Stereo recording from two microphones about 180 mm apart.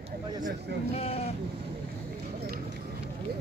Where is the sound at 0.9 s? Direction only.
35° left (ahead or behind).